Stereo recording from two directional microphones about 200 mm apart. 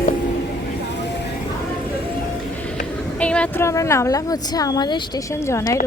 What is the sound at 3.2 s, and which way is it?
A woman's voice, 5° left (ahead or behind).